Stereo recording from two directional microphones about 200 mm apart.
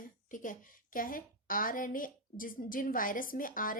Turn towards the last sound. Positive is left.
turn(degrees=45)  # may be behind; listen again after turning